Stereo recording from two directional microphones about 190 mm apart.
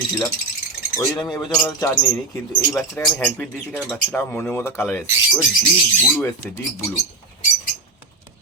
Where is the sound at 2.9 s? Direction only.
5° left (ahead or behind).